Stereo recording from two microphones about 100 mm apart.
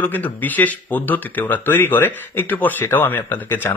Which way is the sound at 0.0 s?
15° left (ahead or behind).